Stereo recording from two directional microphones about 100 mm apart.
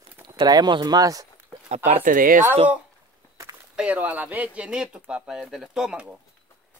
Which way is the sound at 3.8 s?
15° right (ahead or behind).